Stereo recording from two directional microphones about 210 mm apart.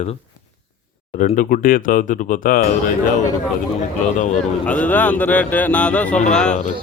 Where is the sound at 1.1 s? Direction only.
35° left (ahead or behind).